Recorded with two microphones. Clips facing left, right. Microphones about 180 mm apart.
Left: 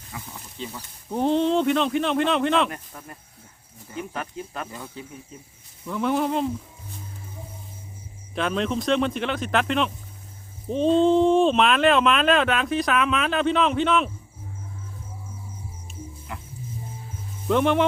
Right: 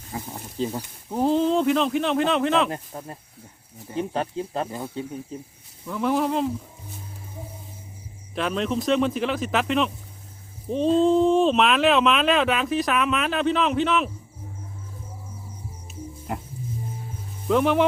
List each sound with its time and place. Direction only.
0.1 s speech: 35° right (ahead or behind)
0.8 s speech: 5° right (ahead or behind)
2.6 s speech: 30° right (ahead or behind)
5.8 s speech: centre (ahead or behind)
8.4 s speech: centre (ahead or behind)
16.3 s music: 40° right (ahead or behind)
17.5 s speech: centre (ahead or behind)